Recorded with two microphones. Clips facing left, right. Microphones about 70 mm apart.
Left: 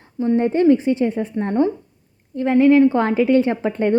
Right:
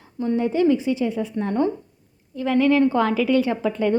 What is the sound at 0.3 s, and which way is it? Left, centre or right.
A woman's voice, left.